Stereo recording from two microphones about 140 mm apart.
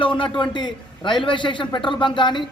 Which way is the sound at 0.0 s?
35° left (ahead or behind).